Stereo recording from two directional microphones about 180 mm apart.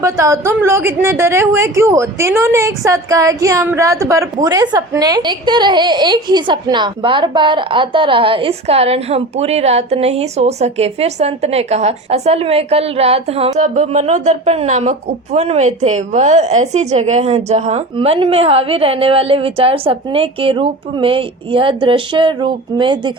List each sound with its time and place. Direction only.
0.0 s a woman's voice: 15° right (ahead or behind)